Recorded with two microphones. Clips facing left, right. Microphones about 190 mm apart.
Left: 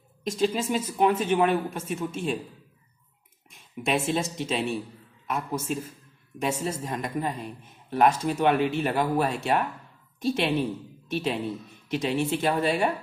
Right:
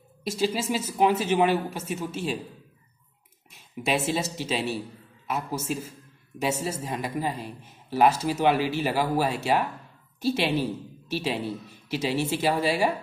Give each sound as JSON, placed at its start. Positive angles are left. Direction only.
{"t": 0.2, "sound": "speech", "side_deg": -5}
{"t": 3.7, "sound": "a man's voice", "side_deg": -5}
{"t": 6.6, "sound": "speech", "side_deg": -5}